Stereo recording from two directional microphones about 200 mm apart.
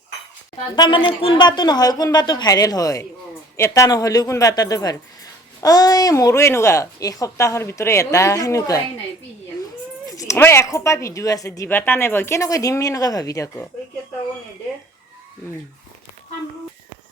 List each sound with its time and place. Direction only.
0.8 s a woman's voice: 25° left (ahead or behind)
10.1 s speech: 15° left (ahead or behind)